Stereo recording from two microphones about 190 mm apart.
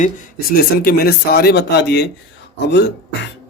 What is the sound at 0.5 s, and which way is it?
Speech, 55° left (ahead or behind).